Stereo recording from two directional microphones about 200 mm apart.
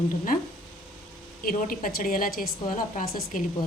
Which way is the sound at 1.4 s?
45° left (ahead or behind).